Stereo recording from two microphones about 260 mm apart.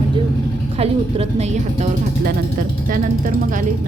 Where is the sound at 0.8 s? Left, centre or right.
Right.